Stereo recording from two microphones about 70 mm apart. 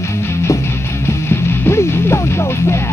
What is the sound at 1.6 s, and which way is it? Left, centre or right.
Music, left.